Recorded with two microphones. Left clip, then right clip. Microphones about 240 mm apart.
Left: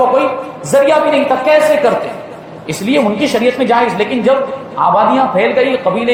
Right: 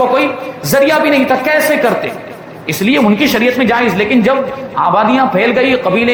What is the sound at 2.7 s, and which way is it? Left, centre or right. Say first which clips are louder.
A woman's voice: right 1 dB; right.